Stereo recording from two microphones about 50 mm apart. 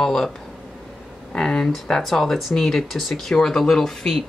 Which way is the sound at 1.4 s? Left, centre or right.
Centre.